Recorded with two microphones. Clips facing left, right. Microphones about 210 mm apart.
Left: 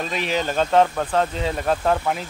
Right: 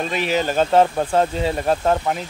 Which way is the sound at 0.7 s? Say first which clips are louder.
Right 2 dB; 30° right (ahead or behind).